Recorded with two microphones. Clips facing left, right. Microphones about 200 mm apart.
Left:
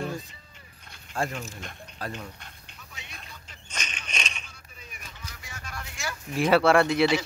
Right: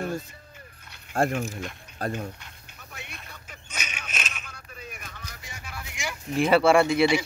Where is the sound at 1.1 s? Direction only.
55° right (ahead or behind).